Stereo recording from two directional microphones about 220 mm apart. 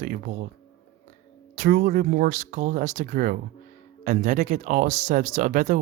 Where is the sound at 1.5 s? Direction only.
35° right (ahead or behind).